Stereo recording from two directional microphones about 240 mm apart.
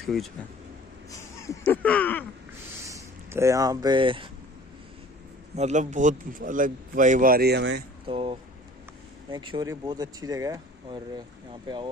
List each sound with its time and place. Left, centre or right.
1.1 s speech: centre
2.9 s speech: centre
5.6 s a man's voice: right
8.1 s speech: right